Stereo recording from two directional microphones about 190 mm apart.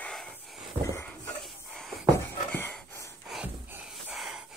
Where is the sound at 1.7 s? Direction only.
Centre (ahead or behind).